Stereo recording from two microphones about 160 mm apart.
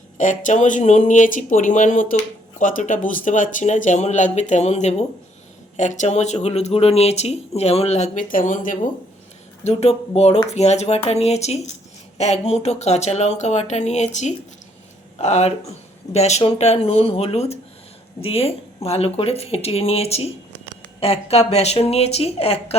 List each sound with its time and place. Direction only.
0.2 s speech: 50° left (ahead or behind)
9.6 s a woman's voice: 45° left (ahead or behind)